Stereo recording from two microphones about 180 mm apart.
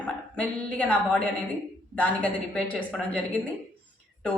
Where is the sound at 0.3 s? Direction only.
5° left (ahead or behind).